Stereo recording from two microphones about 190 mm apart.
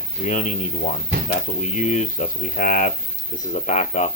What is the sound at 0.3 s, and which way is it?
Speech, 40° left (ahead or behind).